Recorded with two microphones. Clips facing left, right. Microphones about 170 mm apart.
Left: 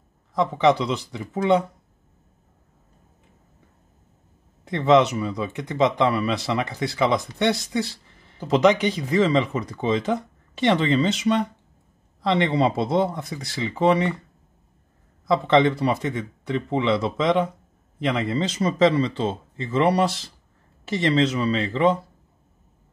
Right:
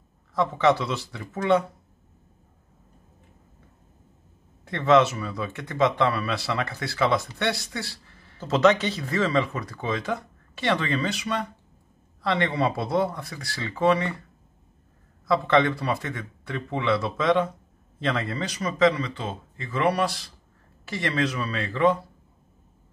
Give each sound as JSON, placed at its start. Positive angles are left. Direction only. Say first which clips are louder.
{"t": 0.3, "sound": "speech", "louder": "left 2 dB", "side_deg": 15}
{"t": 4.6, "sound": "speech", "louder": "left 2 dB", "side_deg": 20}
{"t": 15.2, "sound": "speech", "louder": "left 3 dB", "side_deg": 20}